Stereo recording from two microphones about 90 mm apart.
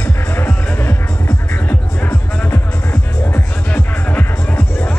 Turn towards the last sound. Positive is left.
turn(degrees=20)  # may be behind; listen again after turning